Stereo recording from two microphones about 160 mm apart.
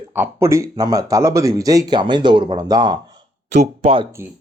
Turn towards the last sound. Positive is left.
turn(degrees=-35)  # may be behind; listen again after turning